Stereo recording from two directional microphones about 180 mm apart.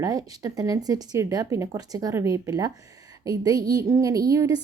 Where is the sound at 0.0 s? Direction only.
20° right (ahead or behind).